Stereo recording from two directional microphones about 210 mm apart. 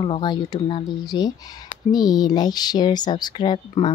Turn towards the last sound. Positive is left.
turn(degrees=25)  # may be behind; listen again after turning